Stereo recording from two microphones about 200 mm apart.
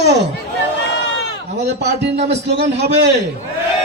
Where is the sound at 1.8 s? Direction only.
55° right (ahead or behind).